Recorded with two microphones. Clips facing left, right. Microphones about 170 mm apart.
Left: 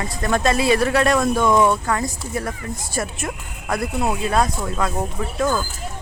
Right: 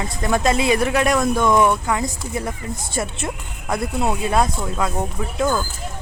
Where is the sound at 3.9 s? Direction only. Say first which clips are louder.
Right 1 dB; centre (ahead or behind).